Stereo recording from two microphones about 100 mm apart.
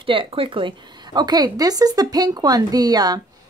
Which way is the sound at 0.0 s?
60° right (ahead or behind).